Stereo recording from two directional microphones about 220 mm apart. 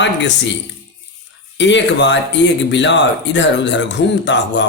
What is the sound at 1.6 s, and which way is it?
Speech, 55° left (ahead or behind).